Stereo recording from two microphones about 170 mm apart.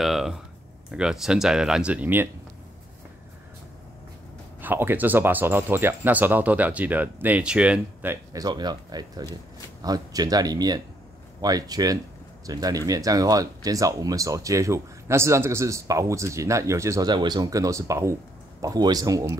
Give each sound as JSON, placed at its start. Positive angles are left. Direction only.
{"t": 0.0, "sound": "speech", "side_deg": 0}
{"t": 4.6, "sound": "speech", "side_deg": -10}